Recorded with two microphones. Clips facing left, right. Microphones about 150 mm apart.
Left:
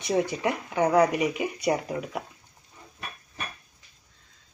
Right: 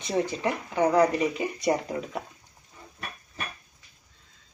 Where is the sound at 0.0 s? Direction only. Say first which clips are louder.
Left 1 dB; 15° left (ahead or behind).